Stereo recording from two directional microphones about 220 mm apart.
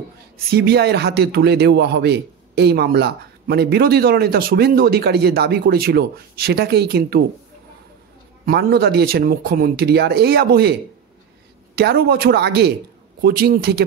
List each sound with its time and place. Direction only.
0.5 s speech: 45° right (ahead or behind)
8.5 s speech: 45° right (ahead or behind)